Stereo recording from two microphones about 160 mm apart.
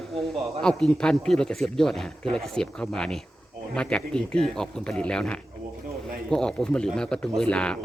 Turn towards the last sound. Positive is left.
turn(degrees=5)  # may be behind; listen again after turning